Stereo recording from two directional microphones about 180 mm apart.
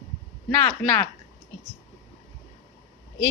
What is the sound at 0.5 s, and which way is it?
Speech, 10° left (ahead or behind).